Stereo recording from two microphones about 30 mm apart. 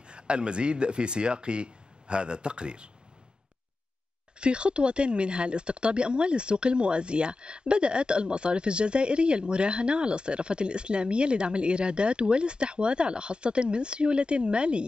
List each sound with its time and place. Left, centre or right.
0.0 s speech: right
4.4 s speech: right